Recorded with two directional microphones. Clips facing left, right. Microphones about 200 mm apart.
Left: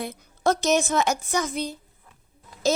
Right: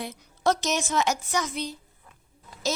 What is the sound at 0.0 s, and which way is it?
A woman's voice, 55° left (ahead or behind).